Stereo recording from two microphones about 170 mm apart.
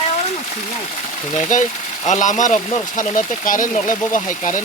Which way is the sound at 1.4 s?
45° left (ahead or behind).